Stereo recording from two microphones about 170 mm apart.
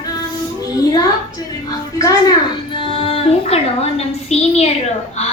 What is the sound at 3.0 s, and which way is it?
Music, 35° left (ahead or behind).